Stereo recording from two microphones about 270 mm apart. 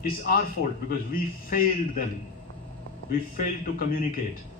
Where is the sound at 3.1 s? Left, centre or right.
Left.